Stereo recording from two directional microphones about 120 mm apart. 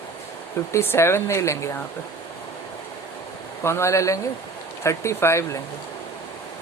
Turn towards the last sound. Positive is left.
turn(degrees=25)  # may be behind; listen again after turning